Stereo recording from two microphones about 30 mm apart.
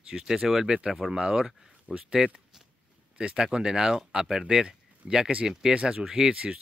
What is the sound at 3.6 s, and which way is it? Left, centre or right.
Speech, right.